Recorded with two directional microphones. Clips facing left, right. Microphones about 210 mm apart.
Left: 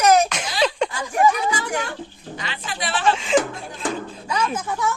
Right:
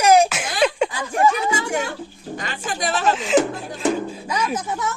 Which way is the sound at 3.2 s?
Centre (ahead or behind).